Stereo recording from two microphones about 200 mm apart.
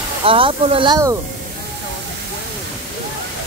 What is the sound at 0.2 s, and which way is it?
Speech, 25° right (ahead or behind).